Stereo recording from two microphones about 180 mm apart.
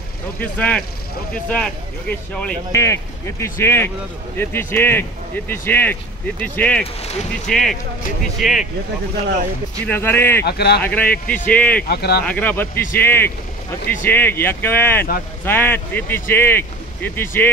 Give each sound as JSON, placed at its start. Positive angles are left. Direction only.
{"t": 0.4, "sound": "speech", "side_deg": 10}
{"t": 7.0, "sound": "speech", "side_deg": 35}
{"t": 7.4, "sound": "speech", "side_deg": 0}
{"t": 9.8, "sound": "speech", "side_deg": 10}
{"t": 10.4, "sound": "speech", "side_deg": 65}
{"t": 10.8, "sound": "speech", "side_deg": 10}
{"t": 11.9, "sound": "speech", "side_deg": 65}
{"t": 12.3, "sound": "speech", "side_deg": 10}